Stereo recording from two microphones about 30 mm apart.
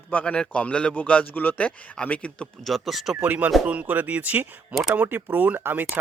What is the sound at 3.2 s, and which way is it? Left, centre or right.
Speech, right.